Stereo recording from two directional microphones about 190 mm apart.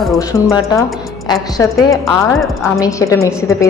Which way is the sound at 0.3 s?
15° left (ahead or behind).